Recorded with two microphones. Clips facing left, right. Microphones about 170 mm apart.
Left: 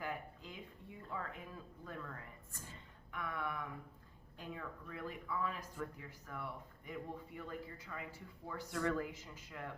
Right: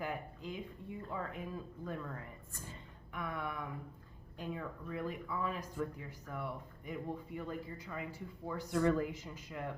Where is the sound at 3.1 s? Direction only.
20° right (ahead or behind).